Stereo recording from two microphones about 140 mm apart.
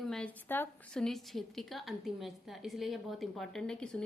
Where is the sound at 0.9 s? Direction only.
5° left (ahead or behind).